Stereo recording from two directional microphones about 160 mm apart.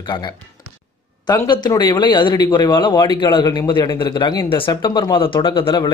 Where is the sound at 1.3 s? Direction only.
25° left (ahead or behind).